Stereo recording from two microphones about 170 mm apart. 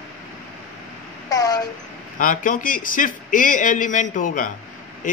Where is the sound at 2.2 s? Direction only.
50° left (ahead or behind).